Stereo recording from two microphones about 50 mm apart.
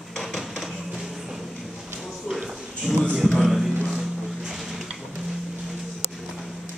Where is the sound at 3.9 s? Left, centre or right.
Centre.